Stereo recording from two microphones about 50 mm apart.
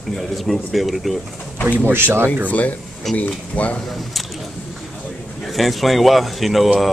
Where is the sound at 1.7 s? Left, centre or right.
Right.